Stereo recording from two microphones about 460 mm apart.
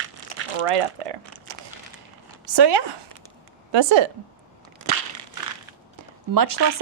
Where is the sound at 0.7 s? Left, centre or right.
Right.